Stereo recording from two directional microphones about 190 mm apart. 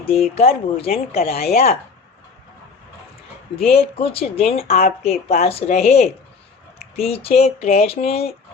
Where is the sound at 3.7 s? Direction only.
30° left (ahead or behind).